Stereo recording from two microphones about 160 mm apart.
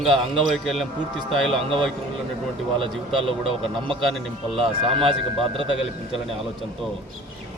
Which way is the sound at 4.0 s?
Centre (ahead or behind).